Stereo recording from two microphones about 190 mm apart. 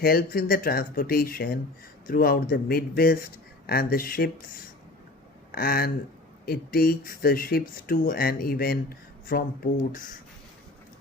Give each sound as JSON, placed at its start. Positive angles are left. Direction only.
{"t": 0.0, "sound": "speech", "side_deg": 50}
{"t": 5.5, "sound": "speech", "side_deg": 50}